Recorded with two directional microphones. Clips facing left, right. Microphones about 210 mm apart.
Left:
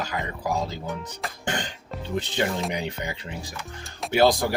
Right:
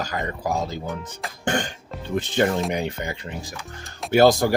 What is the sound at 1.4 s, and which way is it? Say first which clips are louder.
Music: right 6 dB; 50° right (ahead or behind).